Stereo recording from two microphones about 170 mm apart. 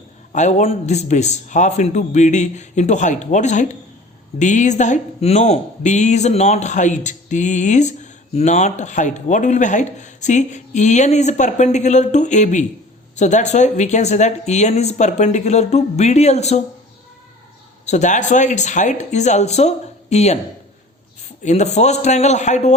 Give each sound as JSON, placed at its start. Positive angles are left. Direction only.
{"t": 0.3, "sound": "speech", "side_deg": 40}
{"t": 17.8, "sound": "speech", "side_deg": 45}
{"t": 21.4, "sound": "speech", "side_deg": 40}